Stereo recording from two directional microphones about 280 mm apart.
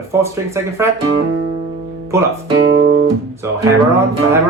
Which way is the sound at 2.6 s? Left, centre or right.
Right.